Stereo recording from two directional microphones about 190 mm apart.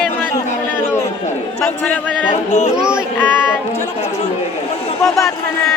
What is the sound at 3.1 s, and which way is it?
Speech, 10° left (ahead or behind).